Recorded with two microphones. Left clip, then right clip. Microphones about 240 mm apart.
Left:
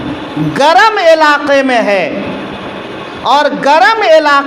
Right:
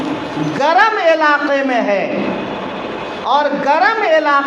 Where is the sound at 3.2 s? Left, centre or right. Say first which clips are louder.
Left 5 dB; left.